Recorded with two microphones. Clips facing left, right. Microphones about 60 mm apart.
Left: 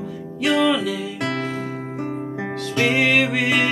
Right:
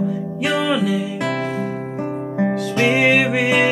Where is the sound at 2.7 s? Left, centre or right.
Centre.